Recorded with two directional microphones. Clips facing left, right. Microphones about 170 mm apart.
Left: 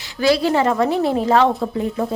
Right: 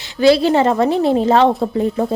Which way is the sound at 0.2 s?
25° right (ahead or behind).